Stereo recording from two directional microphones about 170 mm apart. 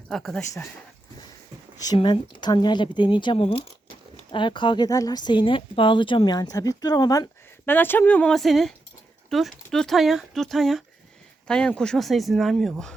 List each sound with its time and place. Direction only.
0.1 s speech: centre (ahead or behind)
2.0 s speech: 25° left (ahead or behind); by 12.9 s centre (ahead or behind)